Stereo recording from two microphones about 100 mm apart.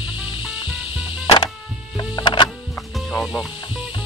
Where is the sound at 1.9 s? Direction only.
50° left (ahead or behind).